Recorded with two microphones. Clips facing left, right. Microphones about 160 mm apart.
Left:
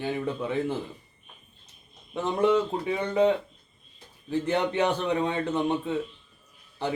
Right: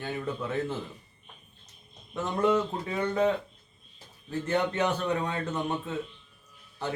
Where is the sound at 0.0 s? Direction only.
15° left (ahead or behind).